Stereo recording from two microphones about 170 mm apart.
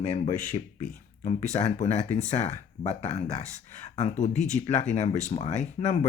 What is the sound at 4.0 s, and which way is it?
Speech, 40° left (ahead or behind).